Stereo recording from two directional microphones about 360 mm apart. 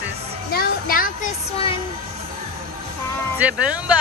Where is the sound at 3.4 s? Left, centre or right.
Centre.